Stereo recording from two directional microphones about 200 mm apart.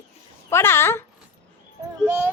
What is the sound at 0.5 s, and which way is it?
Speech, 10° left (ahead or behind).